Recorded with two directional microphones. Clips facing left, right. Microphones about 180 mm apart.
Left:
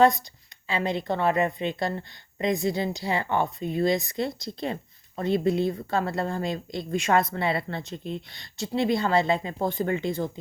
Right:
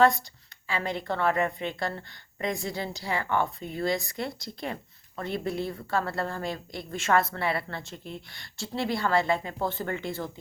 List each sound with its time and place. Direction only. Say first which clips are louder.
0.7 s a woman's voice: left 4 dB; 20° left (ahead or behind)